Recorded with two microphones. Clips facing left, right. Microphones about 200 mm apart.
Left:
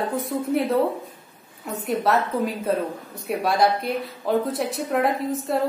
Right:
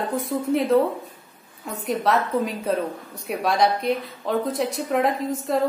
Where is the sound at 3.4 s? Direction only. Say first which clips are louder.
Even; centre (ahead or behind).